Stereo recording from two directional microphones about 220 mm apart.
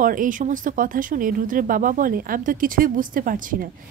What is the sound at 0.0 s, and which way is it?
A woman's voice, 40° right (ahead or behind).